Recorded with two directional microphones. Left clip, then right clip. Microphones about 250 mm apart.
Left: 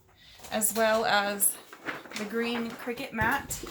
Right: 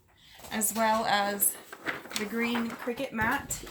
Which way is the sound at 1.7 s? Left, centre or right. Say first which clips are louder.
Right 2 dB; right.